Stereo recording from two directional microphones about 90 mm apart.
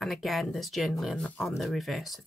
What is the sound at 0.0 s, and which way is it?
Speech, centre (ahead or behind).